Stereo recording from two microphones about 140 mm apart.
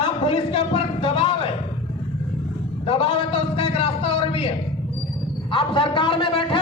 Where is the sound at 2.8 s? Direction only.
45° left (ahead or behind).